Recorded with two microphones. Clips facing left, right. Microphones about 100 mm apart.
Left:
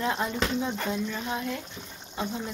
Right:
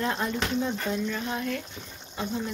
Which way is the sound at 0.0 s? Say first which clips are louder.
Even; 10° left (ahead or behind).